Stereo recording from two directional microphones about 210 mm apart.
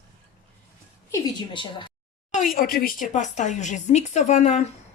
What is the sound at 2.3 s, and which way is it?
Speech, 40° left (ahead or behind).